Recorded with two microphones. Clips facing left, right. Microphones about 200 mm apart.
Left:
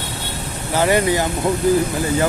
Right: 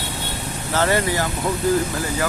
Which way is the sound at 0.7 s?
15° left (ahead or behind).